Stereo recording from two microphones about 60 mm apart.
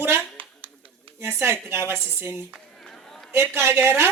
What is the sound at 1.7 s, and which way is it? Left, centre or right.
Speech, right.